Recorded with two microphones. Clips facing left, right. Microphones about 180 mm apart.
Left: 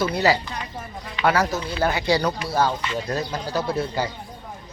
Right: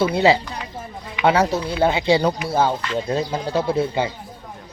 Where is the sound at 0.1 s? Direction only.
25° right (ahead or behind).